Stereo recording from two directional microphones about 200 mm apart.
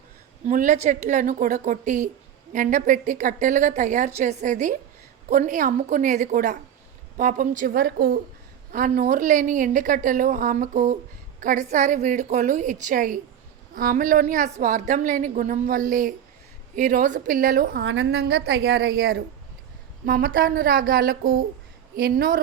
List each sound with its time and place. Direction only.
0.4 s a woman's voice: 40° right (ahead or behind)